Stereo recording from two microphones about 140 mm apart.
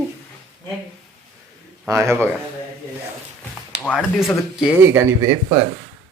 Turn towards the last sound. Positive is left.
turn(degrees=-20)  # may be behind; listen again after turning